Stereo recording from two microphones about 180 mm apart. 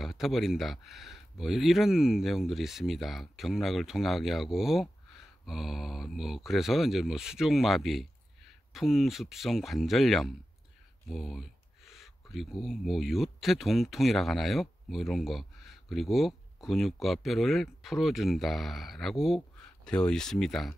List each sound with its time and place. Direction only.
0.0 s speech: centre (ahead or behind)